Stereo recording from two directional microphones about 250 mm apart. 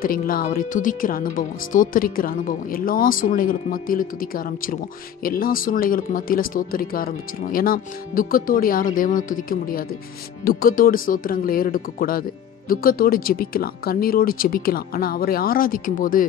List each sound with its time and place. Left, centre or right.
0.0 s speech: left